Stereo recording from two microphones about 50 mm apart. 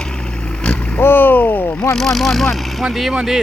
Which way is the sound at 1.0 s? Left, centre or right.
Left.